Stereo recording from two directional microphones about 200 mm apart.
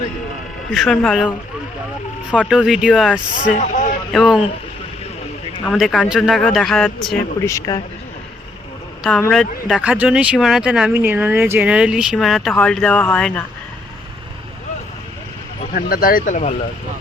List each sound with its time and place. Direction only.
0.7 s speech: centre (ahead or behind)
5.6 s speech: centre (ahead or behind)
7.4 s speech: 15° left (ahead or behind)
9.3 s speech: centre (ahead or behind)
15.7 s speech: 45° left (ahead or behind)